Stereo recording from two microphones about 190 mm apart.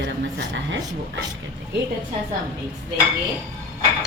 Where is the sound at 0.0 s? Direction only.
65° right (ahead or behind).